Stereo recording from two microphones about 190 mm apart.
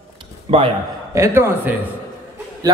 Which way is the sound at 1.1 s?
15° right (ahead or behind).